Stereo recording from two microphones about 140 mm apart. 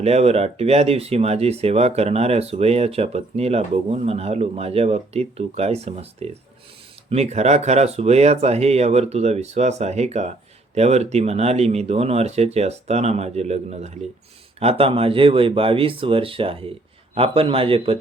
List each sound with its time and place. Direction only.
0.0 s speech: 50° right (ahead or behind)